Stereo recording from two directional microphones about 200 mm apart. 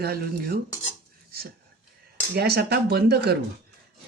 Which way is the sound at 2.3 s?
50° right (ahead or behind).